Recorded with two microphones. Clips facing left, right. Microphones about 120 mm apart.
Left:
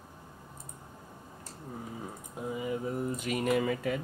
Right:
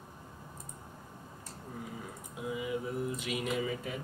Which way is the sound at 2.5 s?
45° left (ahead or behind).